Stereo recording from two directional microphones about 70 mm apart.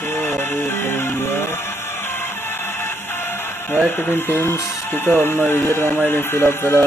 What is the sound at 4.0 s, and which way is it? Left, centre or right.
Speech, left.